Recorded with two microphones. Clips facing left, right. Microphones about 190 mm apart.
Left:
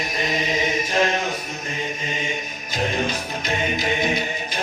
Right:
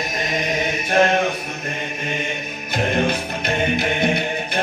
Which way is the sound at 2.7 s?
60° right (ahead or behind).